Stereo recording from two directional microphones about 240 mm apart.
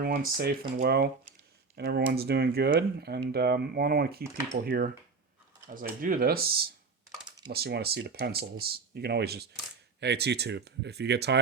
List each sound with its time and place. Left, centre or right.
0.0 s speech: right